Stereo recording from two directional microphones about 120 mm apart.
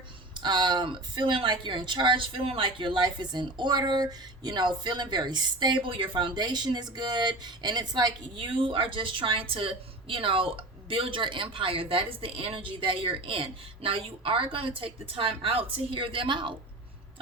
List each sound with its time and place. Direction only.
0.3 s speech: 40° right (ahead or behind)